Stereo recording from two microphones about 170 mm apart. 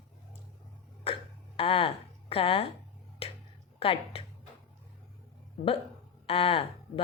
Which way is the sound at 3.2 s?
35° left (ahead or behind).